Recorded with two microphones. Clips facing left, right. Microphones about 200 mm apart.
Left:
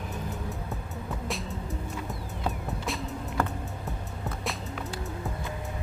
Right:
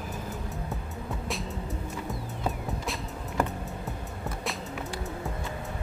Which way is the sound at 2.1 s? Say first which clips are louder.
Right 3 dB; centre (ahead or behind).